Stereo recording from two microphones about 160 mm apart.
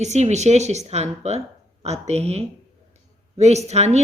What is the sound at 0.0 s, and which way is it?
Speech, 45° right (ahead or behind).